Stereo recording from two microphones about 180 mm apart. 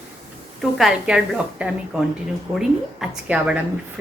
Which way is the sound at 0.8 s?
5° right (ahead or behind).